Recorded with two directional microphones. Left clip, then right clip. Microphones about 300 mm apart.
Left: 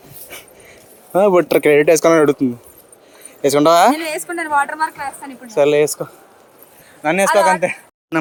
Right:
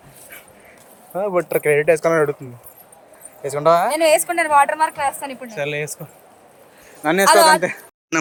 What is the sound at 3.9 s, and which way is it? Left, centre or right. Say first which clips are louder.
A woman's voice: right 4 dB; centre.